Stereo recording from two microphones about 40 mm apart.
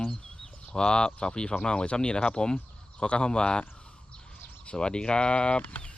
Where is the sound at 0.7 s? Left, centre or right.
Left.